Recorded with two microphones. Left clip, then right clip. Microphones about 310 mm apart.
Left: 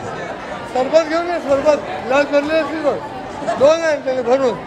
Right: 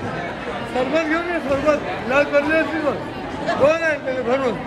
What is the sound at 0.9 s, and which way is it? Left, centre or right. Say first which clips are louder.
A man's voice: left 7 dB; left.